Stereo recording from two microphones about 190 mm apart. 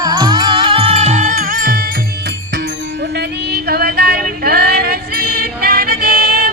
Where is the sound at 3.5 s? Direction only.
55° right (ahead or behind).